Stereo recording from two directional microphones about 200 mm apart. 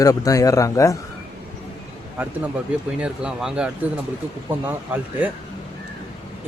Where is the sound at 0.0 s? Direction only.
15° left (ahead or behind).